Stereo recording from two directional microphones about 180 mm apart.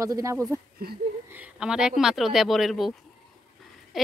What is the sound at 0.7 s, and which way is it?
Speech, 60° right (ahead or behind).